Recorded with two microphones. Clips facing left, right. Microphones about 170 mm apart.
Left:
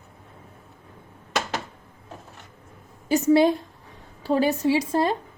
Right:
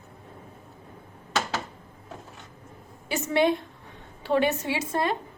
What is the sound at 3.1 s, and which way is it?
A woman's voice, 35° left (ahead or behind).